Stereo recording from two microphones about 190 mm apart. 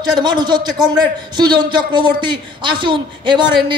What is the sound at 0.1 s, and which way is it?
A man's voice, 20° right (ahead or behind).